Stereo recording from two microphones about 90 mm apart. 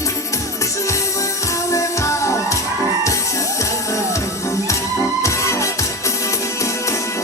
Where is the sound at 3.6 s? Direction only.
35° left (ahead or behind).